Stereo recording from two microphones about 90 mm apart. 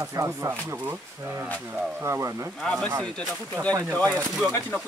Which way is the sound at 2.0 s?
30° right (ahead or behind).